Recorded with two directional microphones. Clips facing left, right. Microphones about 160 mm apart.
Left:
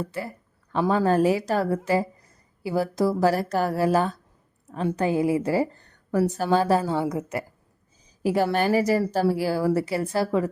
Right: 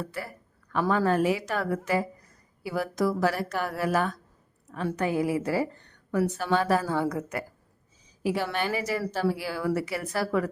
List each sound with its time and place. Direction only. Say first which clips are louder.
0.0 s a woman's voice: left 4 dB; 25° left (ahead or behind)
5.8 s a woman's voice: left 3 dB; 40° left (ahead or behind); by 7.4 s 25° left (ahead or behind)
8.2 s a woman's voice: left 6 dB; 40° left (ahead or behind); by 10.5 s 25° left (ahead or behind)